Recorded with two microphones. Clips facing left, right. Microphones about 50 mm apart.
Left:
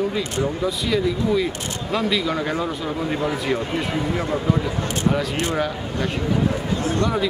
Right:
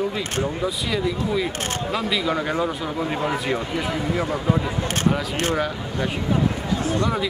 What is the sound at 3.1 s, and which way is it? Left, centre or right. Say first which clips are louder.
Speech: left 2 dB; centre.